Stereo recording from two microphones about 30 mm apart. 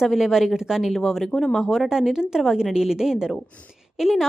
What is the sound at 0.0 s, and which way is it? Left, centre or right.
Speech, centre.